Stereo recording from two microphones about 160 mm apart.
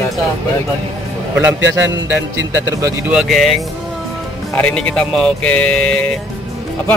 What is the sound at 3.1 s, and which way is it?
Speech, centre (ahead or behind).